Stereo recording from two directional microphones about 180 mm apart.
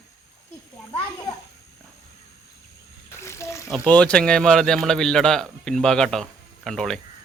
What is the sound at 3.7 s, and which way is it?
A man's voice, 5° left (ahead or behind).